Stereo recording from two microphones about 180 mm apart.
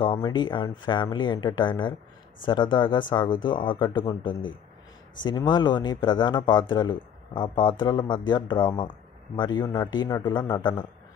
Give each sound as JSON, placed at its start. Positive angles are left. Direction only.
{"t": 0.0, "sound": "speech", "side_deg": 25}